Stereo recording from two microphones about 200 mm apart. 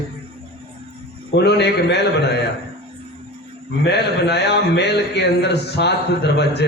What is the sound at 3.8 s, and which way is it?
A man's voice, 55° left (ahead or behind).